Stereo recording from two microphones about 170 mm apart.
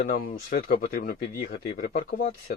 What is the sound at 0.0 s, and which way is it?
Speech, 55° left (ahead or behind).